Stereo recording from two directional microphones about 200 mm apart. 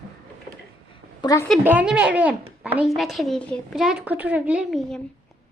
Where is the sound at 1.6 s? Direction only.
5° right (ahead or behind).